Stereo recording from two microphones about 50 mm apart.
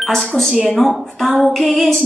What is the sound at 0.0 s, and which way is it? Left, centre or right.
A woman's voice, centre.